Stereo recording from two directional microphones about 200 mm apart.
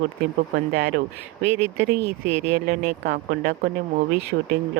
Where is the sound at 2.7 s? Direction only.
50° right (ahead or behind).